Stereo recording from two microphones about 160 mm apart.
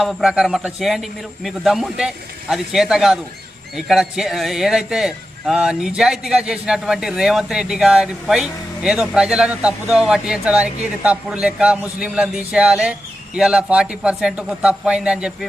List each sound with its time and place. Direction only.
0.0 s a man's voice: centre (ahead or behind)